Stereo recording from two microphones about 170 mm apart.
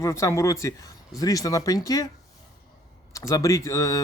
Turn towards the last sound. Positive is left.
turn(degrees=20)  # may be behind; listen again after turning